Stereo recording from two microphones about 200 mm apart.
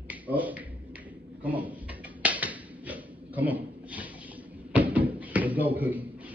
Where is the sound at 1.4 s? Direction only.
5° right (ahead or behind).